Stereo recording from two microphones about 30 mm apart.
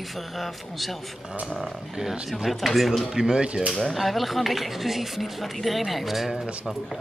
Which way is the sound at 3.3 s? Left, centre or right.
Right.